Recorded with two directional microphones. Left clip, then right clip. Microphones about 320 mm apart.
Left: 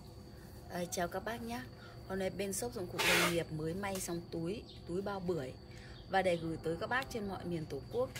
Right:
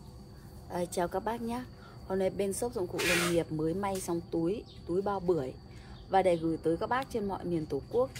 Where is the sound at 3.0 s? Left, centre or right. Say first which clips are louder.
Right 1 dB; left.